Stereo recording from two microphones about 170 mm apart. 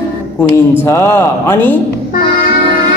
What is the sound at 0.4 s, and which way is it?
Speech, 15° left (ahead or behind).